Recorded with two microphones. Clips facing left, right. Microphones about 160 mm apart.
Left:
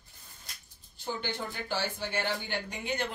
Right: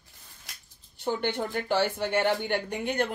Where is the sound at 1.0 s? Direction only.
60° right (ahead or behind).